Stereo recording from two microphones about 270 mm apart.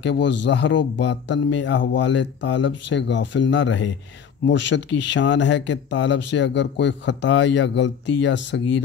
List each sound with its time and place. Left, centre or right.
0.0 s speech: left